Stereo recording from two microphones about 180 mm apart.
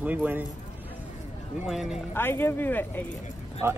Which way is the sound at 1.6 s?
Centre (ahead or behind).